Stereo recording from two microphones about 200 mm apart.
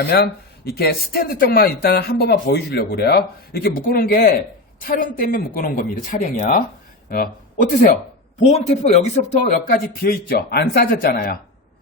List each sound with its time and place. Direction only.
0.1 s speech: 55° left (ahead or behind)